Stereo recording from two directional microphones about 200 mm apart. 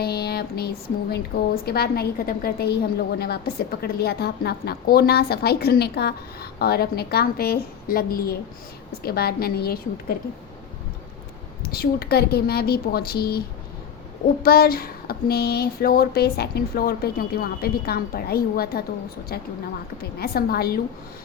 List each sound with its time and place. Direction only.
0.0 s a sound: 50° left (ahead or behind)
1.6 s a woman's voice: 50° left (ahead or behind)
11.7 s a woman's voice: 50° left (ahead or behind)
14.4 s a woman's voice: 50° left (ahead or behind)